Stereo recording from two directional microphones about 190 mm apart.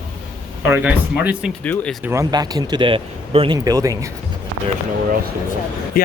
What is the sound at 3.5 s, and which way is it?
Speech, 20° right (ahead or behind).